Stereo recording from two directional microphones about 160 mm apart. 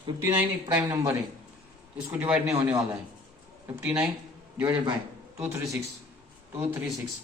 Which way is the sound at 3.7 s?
10° right (ahead or behind).